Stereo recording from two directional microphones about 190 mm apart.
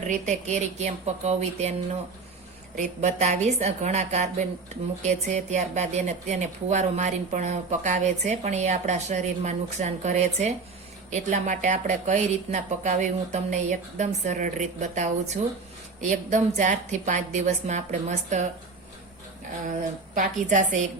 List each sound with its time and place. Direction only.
0.1 s a woman's voice: 40° right (ahead or behind)
2.7 s a woman's voice: 35° right (ahead or behind)
20.1 s a woman's voice: 40° right (ahead or behind)